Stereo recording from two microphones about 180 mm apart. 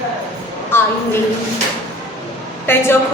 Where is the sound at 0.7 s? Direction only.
10° left (ahead or behind).